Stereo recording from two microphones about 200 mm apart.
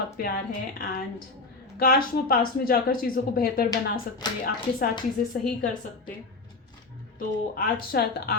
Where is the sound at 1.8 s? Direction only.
50° left (ahead or behind).